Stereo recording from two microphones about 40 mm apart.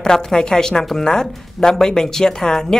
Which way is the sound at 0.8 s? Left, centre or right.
Centre.